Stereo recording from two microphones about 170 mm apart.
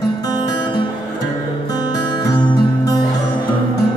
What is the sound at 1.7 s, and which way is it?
Music, 25° left (ahead or behind).